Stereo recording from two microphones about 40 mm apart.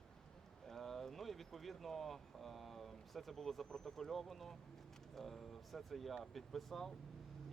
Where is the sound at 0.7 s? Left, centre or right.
Centre.